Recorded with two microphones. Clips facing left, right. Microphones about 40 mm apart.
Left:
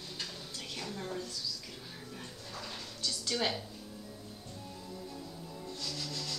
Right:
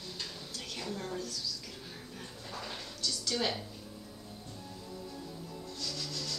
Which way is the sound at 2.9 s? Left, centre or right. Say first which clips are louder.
Right 1 dB; left.